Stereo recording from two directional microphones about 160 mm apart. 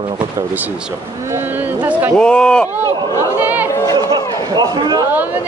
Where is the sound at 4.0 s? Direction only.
25° right (ahead or behind).